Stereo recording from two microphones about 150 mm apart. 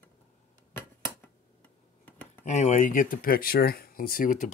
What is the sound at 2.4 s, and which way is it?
Speech, 55° left (ahead or behind).